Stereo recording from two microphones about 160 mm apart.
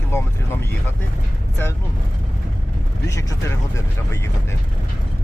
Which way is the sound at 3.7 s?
20° left (ahead or behind).